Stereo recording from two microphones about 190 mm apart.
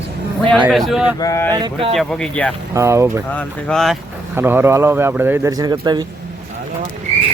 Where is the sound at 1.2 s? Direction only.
15° left (ahead or behind).